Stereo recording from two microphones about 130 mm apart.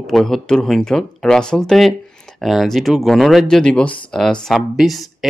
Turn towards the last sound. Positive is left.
turn(degrees=0)  # may be behind; listen again after turning